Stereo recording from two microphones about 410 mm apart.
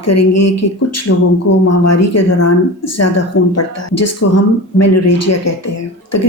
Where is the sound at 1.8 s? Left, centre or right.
Left.